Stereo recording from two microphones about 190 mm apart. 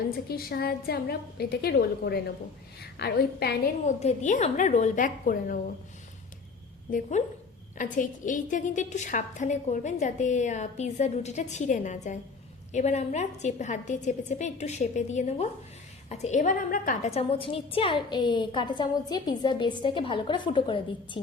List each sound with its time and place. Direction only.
0.3 s a woman's voice: 55° left (ahead or behind)
3.8 s a woman's voice: 40° left (ahead or behind)
7.8 s a woman's voice: 45° left (ahead or behind); by 21.2 s 25° left (ahead or behind)